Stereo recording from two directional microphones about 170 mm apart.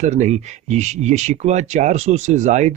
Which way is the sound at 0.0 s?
45° right (ahead or behind).